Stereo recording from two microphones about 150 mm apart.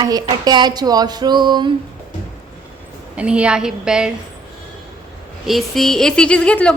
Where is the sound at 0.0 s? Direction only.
25° right (ahead or behind).